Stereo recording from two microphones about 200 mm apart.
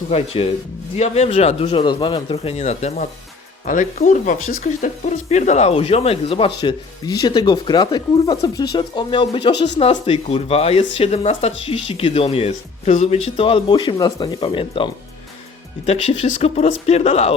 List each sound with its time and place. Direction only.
0.1 s speech: 30° left (ahead or behind)
16.4 s speech: 30° left (ahead or behind)